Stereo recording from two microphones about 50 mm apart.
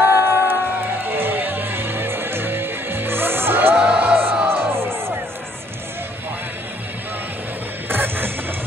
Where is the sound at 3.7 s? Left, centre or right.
Right.